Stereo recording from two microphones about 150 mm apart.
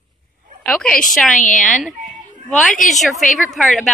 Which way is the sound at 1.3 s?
60° left (ahead or behind).